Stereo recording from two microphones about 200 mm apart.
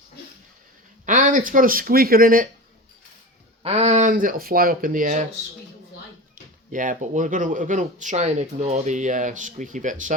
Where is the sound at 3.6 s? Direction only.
30° right (ahead or behind).